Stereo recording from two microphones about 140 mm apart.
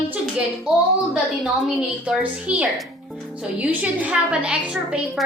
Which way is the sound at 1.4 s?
5° right (ahead or behind).